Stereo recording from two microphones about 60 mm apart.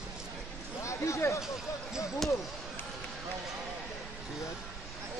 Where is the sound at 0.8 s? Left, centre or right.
Left.